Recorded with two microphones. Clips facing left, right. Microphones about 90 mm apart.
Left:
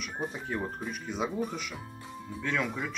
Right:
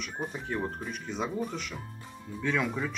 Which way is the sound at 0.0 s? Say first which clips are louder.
Even; centre (ahead or behind).